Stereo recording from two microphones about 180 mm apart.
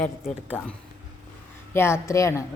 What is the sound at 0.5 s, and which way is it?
Speech, 10° left (ahead or behind).